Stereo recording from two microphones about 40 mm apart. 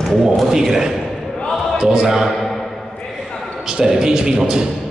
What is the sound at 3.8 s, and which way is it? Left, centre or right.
Speech, centre.